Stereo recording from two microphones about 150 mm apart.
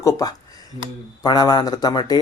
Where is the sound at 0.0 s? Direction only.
25° left (ahead or behind).